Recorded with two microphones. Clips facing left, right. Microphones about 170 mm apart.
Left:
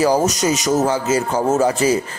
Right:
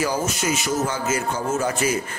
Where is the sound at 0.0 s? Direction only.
40° left (ahead or behind).